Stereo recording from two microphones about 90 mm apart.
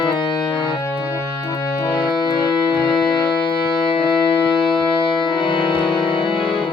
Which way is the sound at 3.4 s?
70° left (ahead or behind).